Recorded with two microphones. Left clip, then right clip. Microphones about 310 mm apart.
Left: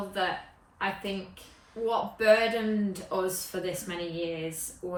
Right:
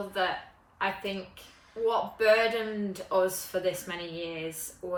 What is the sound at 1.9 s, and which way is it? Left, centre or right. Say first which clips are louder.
Speech: left 1 dB; centre.